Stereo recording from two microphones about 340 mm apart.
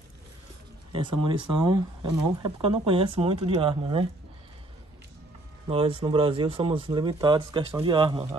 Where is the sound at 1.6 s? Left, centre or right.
Centre.